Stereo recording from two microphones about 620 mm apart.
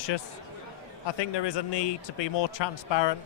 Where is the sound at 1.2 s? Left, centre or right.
Left.